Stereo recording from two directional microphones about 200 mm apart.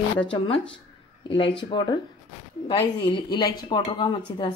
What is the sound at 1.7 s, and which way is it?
Speech, 25° left (ahead or behind).